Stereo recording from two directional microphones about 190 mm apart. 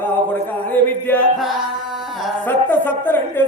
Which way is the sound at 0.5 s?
10° left (ahead or behind).